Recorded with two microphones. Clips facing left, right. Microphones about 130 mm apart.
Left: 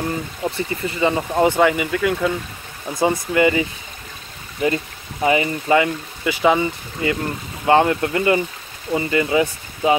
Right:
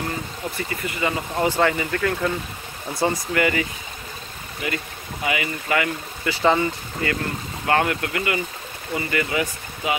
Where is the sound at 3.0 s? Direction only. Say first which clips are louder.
Left 5 dB; 20° left (ahead or behind).